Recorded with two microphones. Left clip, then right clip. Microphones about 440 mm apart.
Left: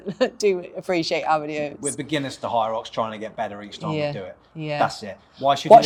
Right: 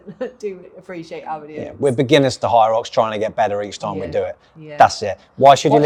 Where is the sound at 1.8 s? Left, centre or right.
Right.